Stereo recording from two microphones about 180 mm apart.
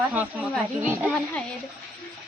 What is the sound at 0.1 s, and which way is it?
Speech, 10° right (ahead or behind).